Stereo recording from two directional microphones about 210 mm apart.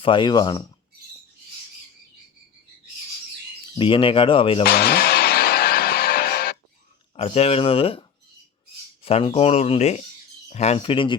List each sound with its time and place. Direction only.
0.0 s speech: 25° left (ahead or behind)
3.8 s speech: 25° left (ahead or behind)
4.6 s music: 50° left (ahead or behind)
7.2 s speech: 30° left (ahead or behind)
9.0 s speech: 30° left (ahead or behind)